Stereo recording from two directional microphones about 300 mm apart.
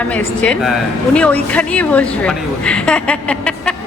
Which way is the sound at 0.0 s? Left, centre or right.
Centre.